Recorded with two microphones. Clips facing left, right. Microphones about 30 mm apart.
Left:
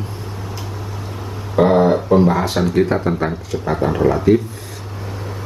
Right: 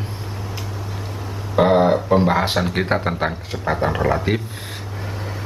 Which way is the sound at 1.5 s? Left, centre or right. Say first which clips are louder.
Left 2 dB; right.